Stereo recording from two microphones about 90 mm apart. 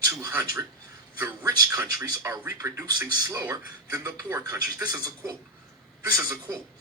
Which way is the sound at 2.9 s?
45° right (ahead or behind).